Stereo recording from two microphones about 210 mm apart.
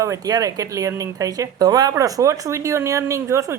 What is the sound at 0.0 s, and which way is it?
Speech, 15° right (ahead or behind).